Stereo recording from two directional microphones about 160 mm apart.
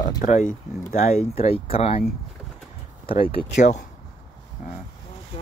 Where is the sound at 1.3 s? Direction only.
40° left (ahead or behind).